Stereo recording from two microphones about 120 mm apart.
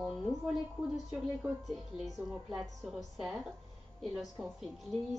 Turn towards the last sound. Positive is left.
turn(degrees=0)  # may be behind; listen again after turning